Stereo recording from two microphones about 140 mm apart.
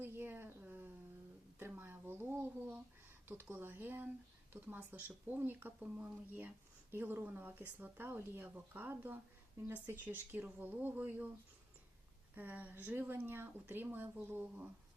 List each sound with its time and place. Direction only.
0.0 s a sound: 15° right (ahead or behind)
3.5 s speech: 15° right (ahead or behind)
12.3 s speech: 10° right (ahead or behind)